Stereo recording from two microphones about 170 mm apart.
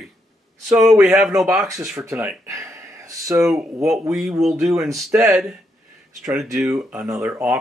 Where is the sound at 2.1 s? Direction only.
15° right (ahead or behind).